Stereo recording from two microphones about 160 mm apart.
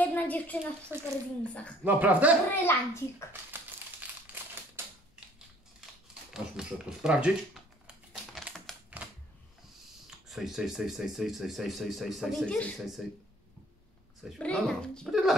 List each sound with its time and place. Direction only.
0.0 s a sound: 10° left (ahead or behind)
0.9 s speech: 10° right (ahead or behind)
1.4 s a child's voice: 10° left (ahead or behind)
1.9 s speech: 10° right (ahead or behind)
2.6 s a child's voice: 15° left (ahead or behind)
4.3 s a sound: 10° right (ahead or behind)
4.8 s typewriter: 15° right (ahead or behind)
6.3 s speech: 5° right (ahead or behind)
7.8 s typing: 5° right (ahead or behind)
9.0 s a sound: 10° right (ahead or behind)
10.0 s speech: centre (ahead or behind)
14.4 s speech: 5° left (ahead or behind)